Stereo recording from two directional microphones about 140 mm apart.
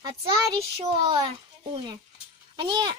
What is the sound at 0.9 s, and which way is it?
A child's voice, 45° right (ahead or behind).